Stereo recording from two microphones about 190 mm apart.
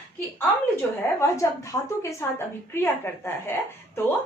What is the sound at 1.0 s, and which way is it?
A woman's voice, 15° left (ahead or behind).